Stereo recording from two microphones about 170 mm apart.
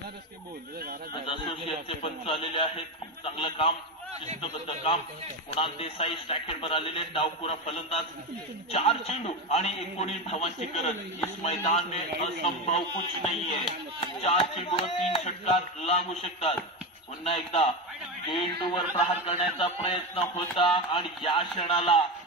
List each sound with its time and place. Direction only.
1.2 s a man's voice: 30° left (ahead or behind)